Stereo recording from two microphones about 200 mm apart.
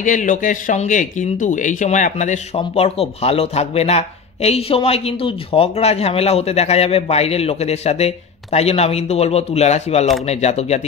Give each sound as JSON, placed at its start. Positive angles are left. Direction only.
{"t": 0.0, "sound": "speech", "side_deg": 40}